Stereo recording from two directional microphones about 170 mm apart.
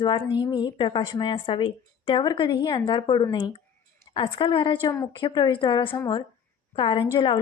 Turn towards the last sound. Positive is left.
turn(degrees=30)  # may be behind; listen again after turning